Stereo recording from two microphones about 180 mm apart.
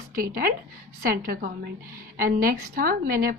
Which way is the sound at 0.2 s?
55° right (ahead or behind).